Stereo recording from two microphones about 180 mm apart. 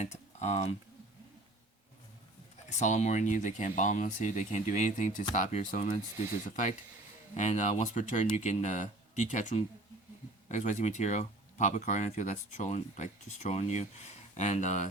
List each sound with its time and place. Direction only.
0.0 s a sound: 40° left (ahead or behind)
2.6 s speech: 40° left (ahead or behind)
7.3 s speech: 40° left (ahead or behind)